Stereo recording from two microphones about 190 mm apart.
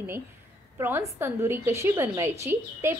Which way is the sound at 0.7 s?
15° right (ahead or behind).